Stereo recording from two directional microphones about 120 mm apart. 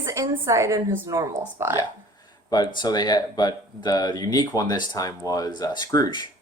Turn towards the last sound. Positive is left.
turn(degrees=35)  # may be behind; listen again after turning